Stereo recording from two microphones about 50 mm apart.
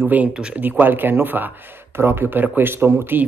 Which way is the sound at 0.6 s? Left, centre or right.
Right.